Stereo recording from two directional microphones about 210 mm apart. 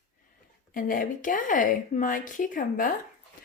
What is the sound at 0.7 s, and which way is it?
Speech, 40° left (ahead or behind).